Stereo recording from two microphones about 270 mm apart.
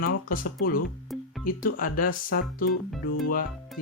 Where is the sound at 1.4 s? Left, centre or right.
Left.